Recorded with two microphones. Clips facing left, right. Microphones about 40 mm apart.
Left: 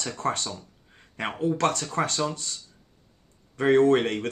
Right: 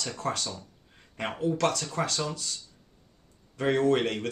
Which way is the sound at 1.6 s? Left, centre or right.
Left.